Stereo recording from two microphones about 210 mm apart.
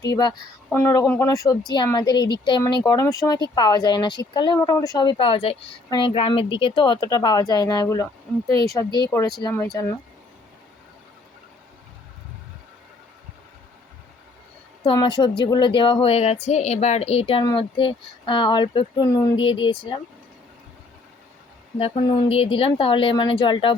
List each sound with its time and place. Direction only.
0.1 s speech: 15° left (ahead or behind)
14.8 s speech: 20° left (ahead or behind)
19.0 s speech: 15° left (ahead or behind)
19.4 s speech: 25° left (ahead or behind)
21.8 s speech: 30° left (ahead or behind)